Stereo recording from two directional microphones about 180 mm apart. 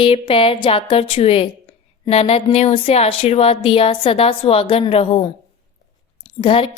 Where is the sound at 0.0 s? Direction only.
30° left (ahead or behind).